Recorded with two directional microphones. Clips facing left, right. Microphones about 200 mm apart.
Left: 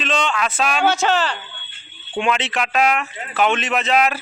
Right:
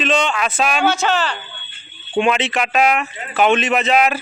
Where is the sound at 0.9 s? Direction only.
35° left (ahead or behind).